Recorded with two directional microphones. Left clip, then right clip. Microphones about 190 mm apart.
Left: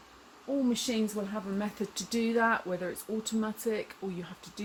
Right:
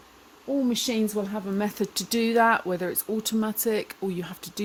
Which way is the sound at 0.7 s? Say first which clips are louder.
Right 5 dB; 55° right (ahead or behind).